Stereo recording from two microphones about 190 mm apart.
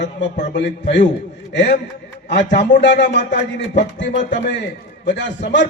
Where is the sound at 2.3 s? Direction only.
65° left (ahead or behind).